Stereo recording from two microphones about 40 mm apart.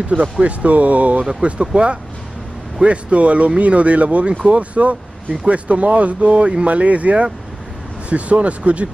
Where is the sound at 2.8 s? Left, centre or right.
Right.